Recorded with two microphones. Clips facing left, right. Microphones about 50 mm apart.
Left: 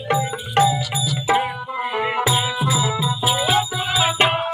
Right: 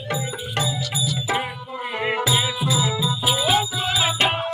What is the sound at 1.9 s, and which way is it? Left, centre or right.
Music, centre.